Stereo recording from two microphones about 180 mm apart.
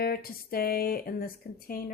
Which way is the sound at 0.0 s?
55° left (ahead or behind).